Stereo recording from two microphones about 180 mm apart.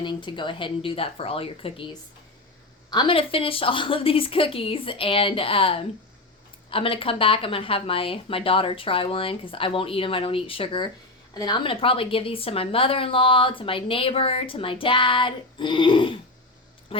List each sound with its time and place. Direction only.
0.0 s a woman's voice: 25° left (ahead or behind)